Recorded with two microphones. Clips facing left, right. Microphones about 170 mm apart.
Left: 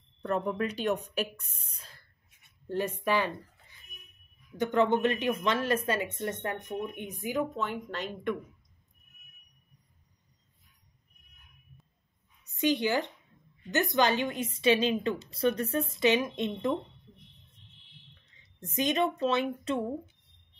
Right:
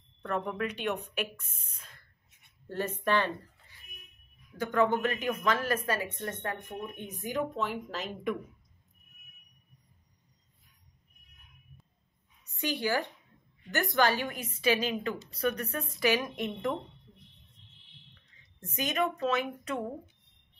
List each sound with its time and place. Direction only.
0.2 s speech: 35° left (ahead or behind)
2.7 s a woman's voice: 10° left (ahead or behind)
4.6 s speech: 25° left (ahead or behind); by 8.4 s centre (ahead or behind)
12.5 s speech: 20° left (ahead or behind)
18.7 s speech: 25° left (ahead or behind)